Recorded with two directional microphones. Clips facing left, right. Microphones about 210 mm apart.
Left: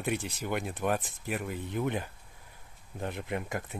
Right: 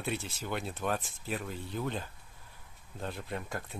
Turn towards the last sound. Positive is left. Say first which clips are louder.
# left 4 dB
turn(degrees=15)  # may be behind; listen again after turning